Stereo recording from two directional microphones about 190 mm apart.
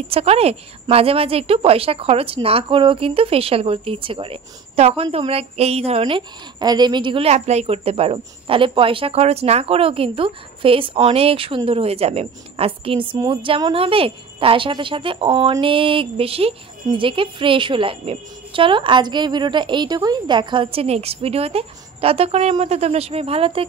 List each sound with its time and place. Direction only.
0.1 s a woman's voice: 30° right (ahead or behind)